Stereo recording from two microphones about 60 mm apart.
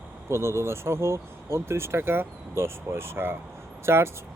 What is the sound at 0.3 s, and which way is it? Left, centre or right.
Speech, right.